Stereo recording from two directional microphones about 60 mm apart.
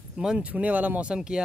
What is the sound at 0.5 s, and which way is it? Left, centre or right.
Speech, right.